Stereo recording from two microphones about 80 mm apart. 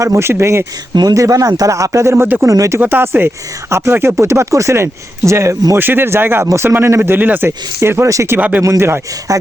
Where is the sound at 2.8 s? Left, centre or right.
Right.